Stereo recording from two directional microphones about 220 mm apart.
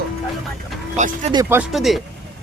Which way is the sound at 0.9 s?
35° right (ahead or behind).